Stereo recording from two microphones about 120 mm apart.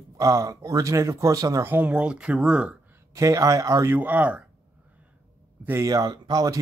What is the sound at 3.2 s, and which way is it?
Speech, 25° right (ahead or behind).